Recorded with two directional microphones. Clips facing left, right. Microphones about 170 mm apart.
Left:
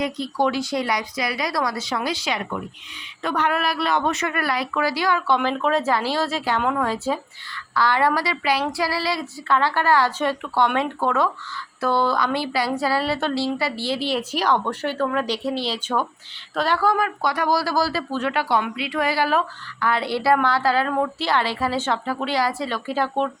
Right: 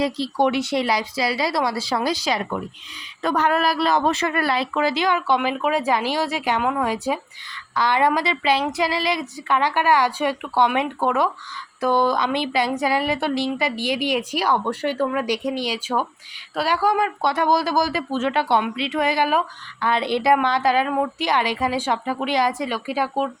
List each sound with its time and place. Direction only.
0.0 s a woman's voice: 25° right (ahead or behind); by 23.3 s 10° right (ahead or behind)